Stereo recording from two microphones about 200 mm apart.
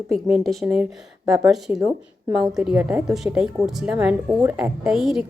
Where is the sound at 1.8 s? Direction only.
20° right (ahead or behind).